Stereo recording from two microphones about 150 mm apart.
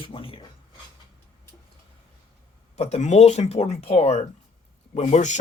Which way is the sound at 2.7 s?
45° left (ahead or behind).